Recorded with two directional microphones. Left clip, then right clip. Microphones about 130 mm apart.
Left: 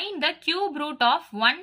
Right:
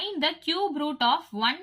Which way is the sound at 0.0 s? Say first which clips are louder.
Left 2 dB; 40° left (ahead or behind).